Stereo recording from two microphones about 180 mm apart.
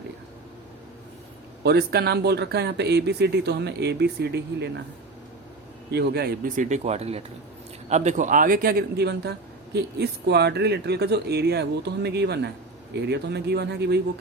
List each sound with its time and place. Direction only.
1.6 s speech: 65° right (ahead or behind)
5.9 s a man's voice: 65° right (ahead or behind)